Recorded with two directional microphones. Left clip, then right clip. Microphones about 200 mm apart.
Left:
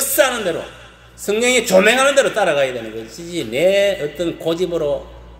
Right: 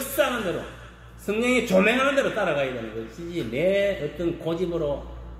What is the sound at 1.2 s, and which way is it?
A man's voice, 20° left (ahead or behind).